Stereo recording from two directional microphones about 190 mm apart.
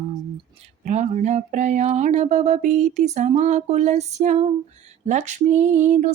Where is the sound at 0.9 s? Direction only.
35° right (ahead or behind).